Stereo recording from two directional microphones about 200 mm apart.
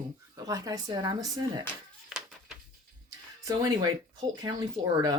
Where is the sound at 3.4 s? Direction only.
20° right (ahead or behind).